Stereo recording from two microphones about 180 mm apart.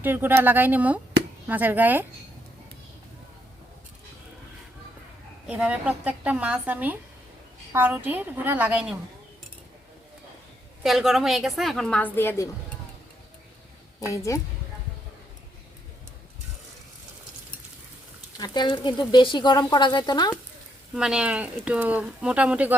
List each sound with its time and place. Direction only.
0.0 s speech: 10° right (ahead or behind)
5.5 s speech: 5° right (ahead or behind)
10.8 s a woman's voice: centre (ahead or behind)
14.3 s speech: 20° left (ahead or behind)
18.3 s speech: 25° left (ahead or behind)
20.9 s speech: 5° right (ahead or behind)